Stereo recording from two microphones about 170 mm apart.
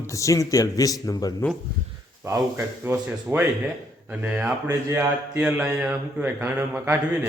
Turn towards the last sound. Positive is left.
turn(degrees=-10)  # may be behind; listen again after turning